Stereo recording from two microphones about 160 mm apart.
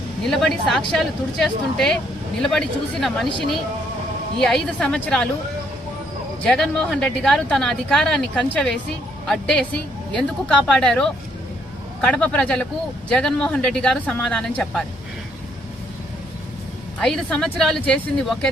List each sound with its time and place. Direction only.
0.3 s a woman's voice: 5° left (ahead or behind)
4.4 s a woman's voice: 5° left (ahead or behind)
6.4 s a woman's voice: 5° left (ahead or behind)
17.0 s a woman's voice: 5° left (ahead or behind)